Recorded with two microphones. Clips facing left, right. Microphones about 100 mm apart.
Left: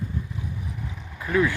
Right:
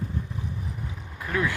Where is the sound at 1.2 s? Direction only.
5° left (ahead or behind).